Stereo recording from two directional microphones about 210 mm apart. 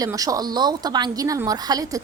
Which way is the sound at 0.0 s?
15° right (ahead or behind).